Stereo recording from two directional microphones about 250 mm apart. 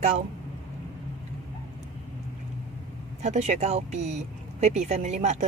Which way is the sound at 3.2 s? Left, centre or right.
Right.